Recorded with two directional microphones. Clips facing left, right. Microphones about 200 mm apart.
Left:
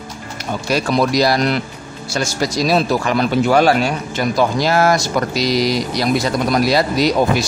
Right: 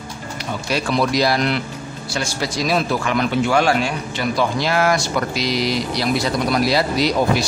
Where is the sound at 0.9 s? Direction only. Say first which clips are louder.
Left 2 dB; 40° left (ahead or behind).